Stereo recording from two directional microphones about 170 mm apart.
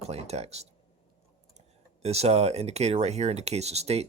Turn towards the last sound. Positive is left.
turn(degrees=-40)  # may be behind; listen again after turning